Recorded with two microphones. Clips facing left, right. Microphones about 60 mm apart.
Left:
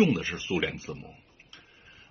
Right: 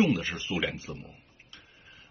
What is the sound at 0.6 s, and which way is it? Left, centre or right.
Speech, left.